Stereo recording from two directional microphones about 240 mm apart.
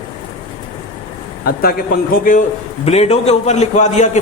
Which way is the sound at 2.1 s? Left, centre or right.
Left.